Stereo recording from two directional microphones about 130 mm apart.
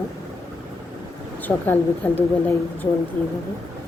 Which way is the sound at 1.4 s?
15° left (ahead or behind).